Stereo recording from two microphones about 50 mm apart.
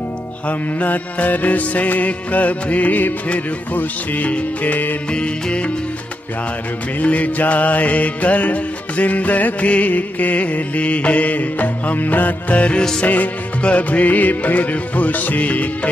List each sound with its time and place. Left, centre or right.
0.5 s music: left
5.1 s music: left
7.0 s music: left